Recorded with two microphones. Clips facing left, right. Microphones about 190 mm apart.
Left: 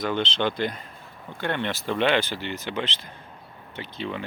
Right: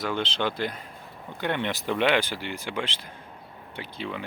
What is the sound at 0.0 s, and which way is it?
Speech, 10° right (ahead or behind).